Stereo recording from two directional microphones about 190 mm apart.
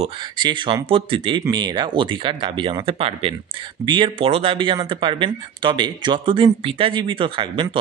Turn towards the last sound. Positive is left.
turn(degrees=-25)  # may be behind; listen again after turning